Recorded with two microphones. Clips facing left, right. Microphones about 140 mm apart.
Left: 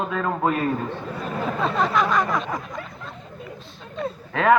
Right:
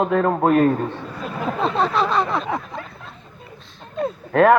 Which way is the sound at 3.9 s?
50° right (ahead or behind).